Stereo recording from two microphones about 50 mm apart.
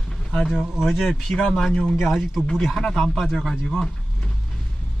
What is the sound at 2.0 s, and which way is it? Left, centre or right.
Speech, centre.